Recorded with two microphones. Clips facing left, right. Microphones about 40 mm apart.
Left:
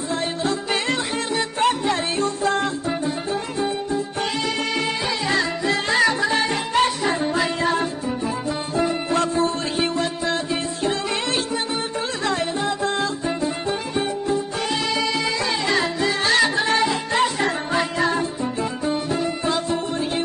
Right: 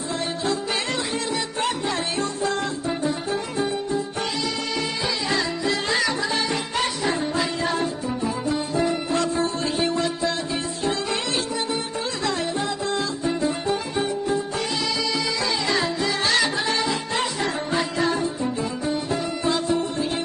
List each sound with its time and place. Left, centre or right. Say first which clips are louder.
0.1 s music: left 2 dB; left
4.4 s music: left 4 dB; left
8.7 s music: left 4 dB; left
15.0 s music: left 2 dB; left
19.1 s music: left 1 dB; centre